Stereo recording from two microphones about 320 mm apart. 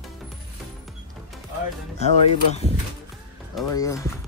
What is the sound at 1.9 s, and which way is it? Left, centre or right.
Speech, left.